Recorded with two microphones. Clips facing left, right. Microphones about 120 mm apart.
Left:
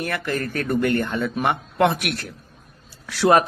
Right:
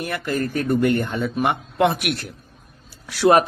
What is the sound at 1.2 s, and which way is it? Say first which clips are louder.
Speech: right 1 dB; 5° right (ahead or behind).